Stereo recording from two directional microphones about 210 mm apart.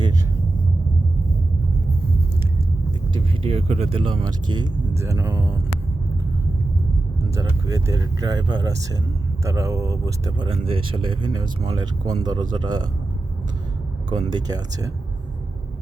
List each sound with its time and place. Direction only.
3.2 s speech: 25° right (ahead or behind)
7.3 s speech: 15° right (ahead or behind)
14.1 s speech: 20° right (ahead or behind)